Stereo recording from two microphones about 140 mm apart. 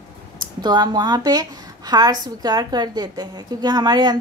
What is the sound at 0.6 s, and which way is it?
A woman's voice, 30° right (ahead or behind).